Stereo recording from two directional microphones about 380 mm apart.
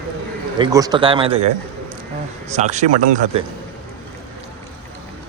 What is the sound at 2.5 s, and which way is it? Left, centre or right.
Speech, centre.